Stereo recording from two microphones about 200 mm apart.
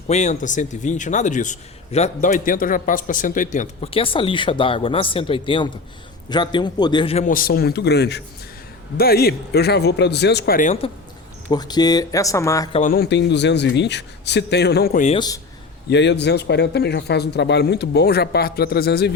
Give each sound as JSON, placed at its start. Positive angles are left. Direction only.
{"t": 0.1, "sound": "a man's voice", "side_deg": 35}
{"t": 11.5, "sound": "speech", "side_deg": 20}
{"t": 12.7, "sound": "a man's voice", "side_deg": 45}